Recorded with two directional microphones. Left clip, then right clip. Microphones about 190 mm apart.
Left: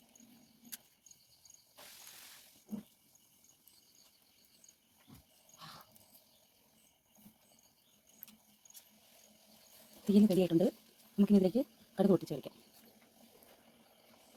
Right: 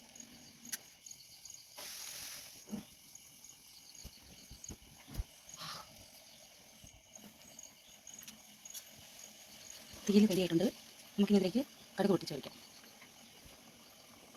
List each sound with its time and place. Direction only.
10.1 s speech: 50° left (ahead or behind)